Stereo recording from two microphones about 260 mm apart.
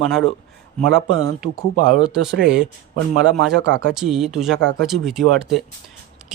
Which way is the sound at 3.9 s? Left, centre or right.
Centre.